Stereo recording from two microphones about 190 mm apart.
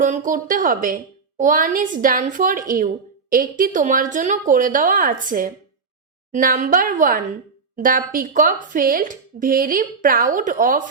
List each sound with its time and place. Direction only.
0.0 s speech: 45° right (ahead or behind)